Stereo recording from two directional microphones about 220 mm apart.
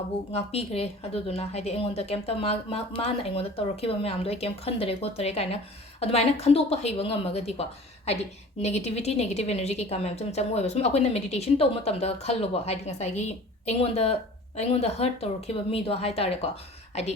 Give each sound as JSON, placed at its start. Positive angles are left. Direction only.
{"t": 0.3, "sound": "a woman's voice", "side_deg": 25}